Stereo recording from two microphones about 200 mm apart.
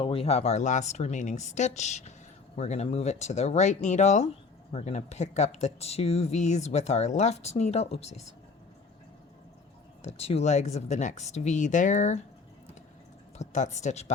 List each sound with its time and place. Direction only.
0.0 s speech: 25° left (ahead or behind)
10.0 s speech: 30° left (ahead or behind)
13.4 s speech: 35° left (ahead or behind)